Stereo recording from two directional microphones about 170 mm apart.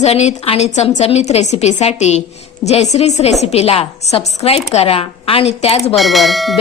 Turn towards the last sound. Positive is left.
turn(degrees=0)  # may be behind; listen again after turning